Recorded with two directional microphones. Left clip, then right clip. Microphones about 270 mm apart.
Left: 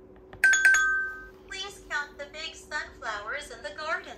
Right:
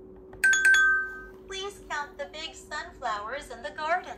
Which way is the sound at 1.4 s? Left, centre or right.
Right.